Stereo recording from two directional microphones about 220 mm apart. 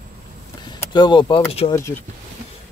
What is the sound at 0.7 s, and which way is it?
Speech, 20° left (ahead or behind).